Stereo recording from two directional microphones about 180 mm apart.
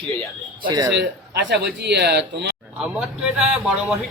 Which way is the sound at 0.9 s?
70° right (ahead or behind).